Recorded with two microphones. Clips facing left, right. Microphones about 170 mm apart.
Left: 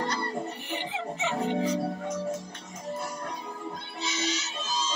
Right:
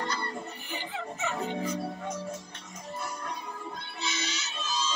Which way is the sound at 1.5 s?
80° left.